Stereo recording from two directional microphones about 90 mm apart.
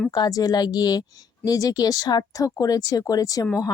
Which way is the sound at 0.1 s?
45° left (ahead or behind).